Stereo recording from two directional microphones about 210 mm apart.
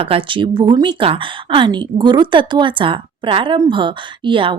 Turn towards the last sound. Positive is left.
turn(degrees=-25)  # may be behind; listen again after turning